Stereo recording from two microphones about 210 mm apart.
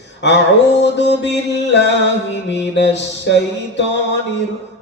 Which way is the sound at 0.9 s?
55° left (ahead or behind).